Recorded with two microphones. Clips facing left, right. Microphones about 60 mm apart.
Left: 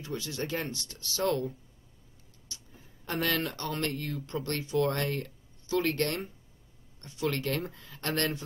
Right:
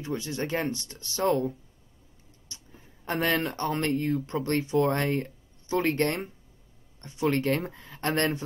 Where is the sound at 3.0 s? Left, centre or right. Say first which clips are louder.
Right 4 dB; right.